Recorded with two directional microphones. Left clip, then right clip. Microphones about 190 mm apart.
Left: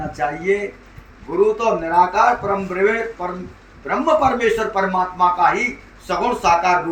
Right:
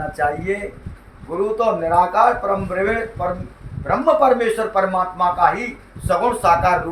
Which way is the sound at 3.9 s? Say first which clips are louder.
Right 2 dB; 20° right (ahead or behind).